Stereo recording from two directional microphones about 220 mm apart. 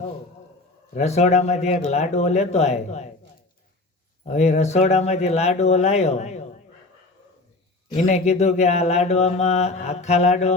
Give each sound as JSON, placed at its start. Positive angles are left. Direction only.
{"t": 0.9, "sound": "mantra", "side_deg": 30}
{"t": 4.3, "sound": "mantra", "side_deg": 30}
{"t": 7.9, "sound": "mantra", "side_deg": 30}